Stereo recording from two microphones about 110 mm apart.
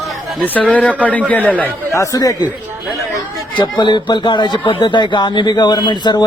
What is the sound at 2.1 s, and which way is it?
Speech, 35° left (ahead or behind).